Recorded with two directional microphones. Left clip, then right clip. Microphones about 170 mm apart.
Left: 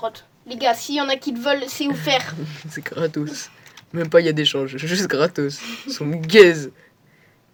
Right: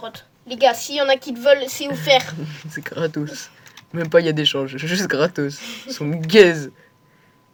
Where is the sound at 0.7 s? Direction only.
45° left (ahead or behind).